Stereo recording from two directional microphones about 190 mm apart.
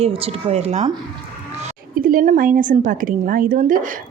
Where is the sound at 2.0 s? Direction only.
45° right (ahead or behind).